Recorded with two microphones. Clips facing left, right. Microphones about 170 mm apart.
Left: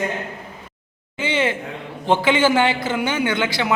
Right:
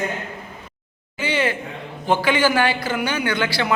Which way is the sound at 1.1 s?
20° left (ahead or behind).